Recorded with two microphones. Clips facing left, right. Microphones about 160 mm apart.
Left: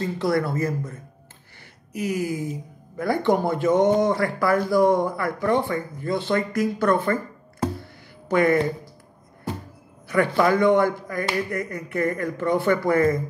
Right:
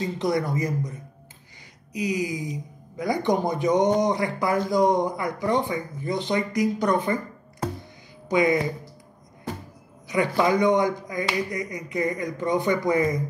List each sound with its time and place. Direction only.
0.0 s speech: 20° right (ahead or behind)
8.3 s speech: 15° right (ahead or behind)
10.0 s speech: 15° right (ahead or behind)